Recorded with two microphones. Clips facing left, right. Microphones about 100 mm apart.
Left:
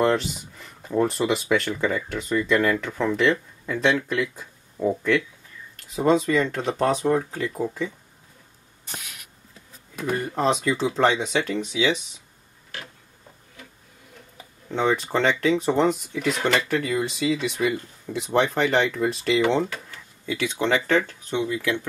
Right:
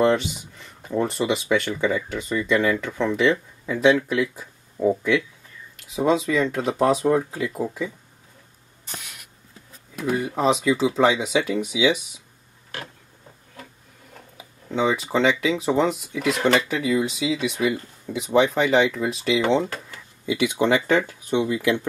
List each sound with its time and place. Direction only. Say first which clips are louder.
0.0 s speech: right 2 dB; centre (ahead or behind)
9.9 s speech: right 2 dB; 5° right (ahead or behind)
14.3 s speech: right 2 dB; 5° right (ahead or behind)
20.2 s speech: right 3 dB; 15° right (ahead or behind)